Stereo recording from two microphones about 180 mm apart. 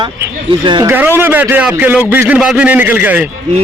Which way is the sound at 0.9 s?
10° right (ahead or behind).